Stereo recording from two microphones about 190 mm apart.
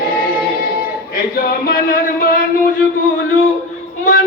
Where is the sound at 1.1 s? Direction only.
55° left (ahead or behind).